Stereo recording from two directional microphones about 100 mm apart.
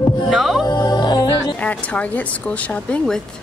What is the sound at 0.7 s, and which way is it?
Music, 45° left (ahead or behind).